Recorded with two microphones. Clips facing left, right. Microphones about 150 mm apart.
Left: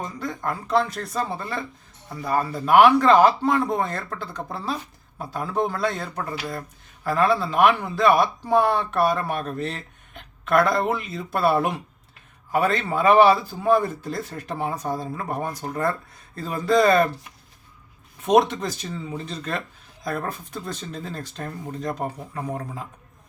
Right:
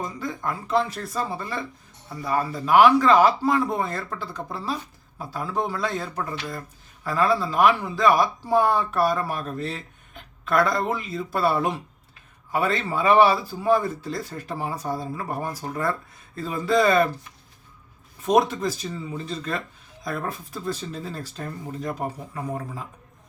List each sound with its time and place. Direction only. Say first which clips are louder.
0.2 s speech: left 1 dB; 5° right (ahead or behind)
6.3 s speech: left 2 dB; 10° left (ahead or behind)
18.3 s speech: left 2 dB; centre (ahead or behind)